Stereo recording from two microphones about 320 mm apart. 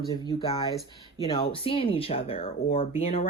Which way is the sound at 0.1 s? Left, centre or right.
Centre.